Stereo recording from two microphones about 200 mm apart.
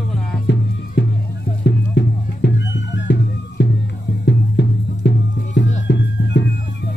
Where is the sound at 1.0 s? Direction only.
60° left (ahead or behind).